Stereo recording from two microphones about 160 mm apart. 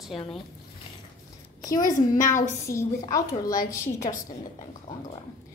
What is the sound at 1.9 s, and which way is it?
Speech, 55° left (ahead or behind).